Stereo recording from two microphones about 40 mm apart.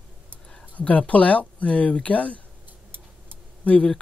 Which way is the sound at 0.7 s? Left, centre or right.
Left.